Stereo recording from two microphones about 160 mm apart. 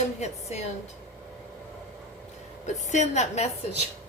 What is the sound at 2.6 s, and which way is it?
Speech, 45° left (ahead or behind).